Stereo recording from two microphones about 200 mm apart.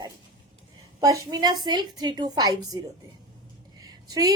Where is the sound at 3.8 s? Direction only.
20° right (ahead or behind).